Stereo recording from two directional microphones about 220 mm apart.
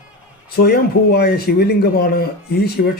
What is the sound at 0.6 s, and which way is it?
Speech, 45° left (ahead or behind).